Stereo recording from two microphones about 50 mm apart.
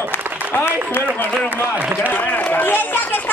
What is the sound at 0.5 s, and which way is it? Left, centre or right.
Speech, left.